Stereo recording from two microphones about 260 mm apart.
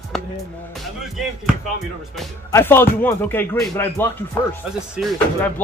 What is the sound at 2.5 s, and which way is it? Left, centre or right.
Speech, centre.